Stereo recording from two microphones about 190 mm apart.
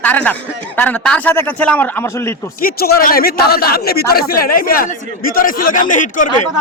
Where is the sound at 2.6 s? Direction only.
50° left (ahead or behind).